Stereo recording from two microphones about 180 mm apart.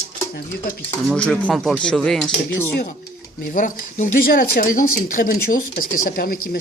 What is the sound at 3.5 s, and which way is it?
Speech, 45° left (ahead or behind).